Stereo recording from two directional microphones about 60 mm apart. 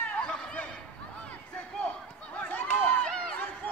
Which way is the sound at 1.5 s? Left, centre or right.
Centre.